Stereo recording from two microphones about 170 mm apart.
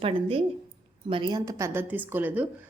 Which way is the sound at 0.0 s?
35° right (ahead or behind).